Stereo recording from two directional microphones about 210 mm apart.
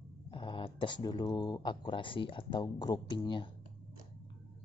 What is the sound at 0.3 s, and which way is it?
Speech, 25° left (ahead or behind).